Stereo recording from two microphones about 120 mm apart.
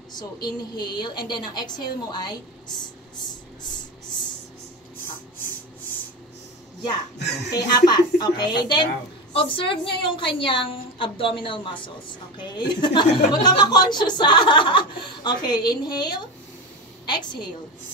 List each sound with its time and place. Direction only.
0.1 s speech: 35° left (ahead or behind)
7.5 s a woman's voice: 35° left (ahead or behind)